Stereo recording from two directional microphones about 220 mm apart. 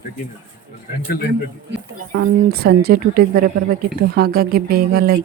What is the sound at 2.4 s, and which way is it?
Speech, 45° right (ahead or behind).